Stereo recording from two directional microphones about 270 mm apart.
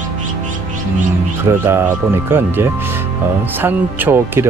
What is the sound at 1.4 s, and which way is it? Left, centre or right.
Speech, centre.